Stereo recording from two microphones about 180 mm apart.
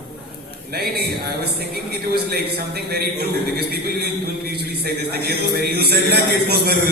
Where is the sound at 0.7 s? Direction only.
60° right (ahead or behind).